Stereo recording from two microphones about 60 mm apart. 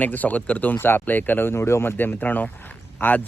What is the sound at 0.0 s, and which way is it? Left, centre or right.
Speech, left.